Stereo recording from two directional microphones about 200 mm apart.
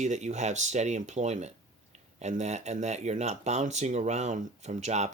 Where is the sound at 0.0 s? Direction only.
35° right (ahead or behind).